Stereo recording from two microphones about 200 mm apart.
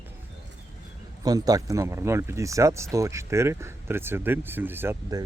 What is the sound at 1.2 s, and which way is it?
Speech, 20° right (ahead or behind).